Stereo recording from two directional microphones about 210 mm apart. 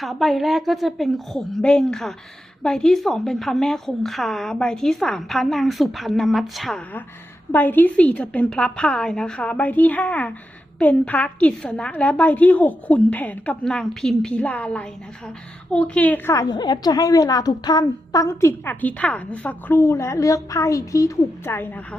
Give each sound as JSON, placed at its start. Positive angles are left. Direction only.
{"t": 0.0, "sound": "a woman's voice", "side_deg": 0}